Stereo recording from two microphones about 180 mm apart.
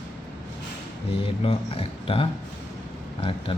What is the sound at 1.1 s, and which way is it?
Speech, 30° left (ahead or behind).